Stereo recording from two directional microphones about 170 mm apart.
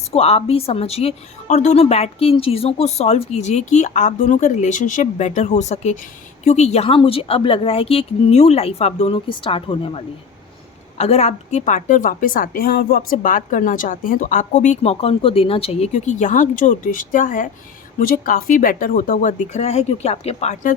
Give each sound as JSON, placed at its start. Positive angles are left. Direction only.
{"t": 0.1, "sound": "a woman's voice", "side_deg": 35}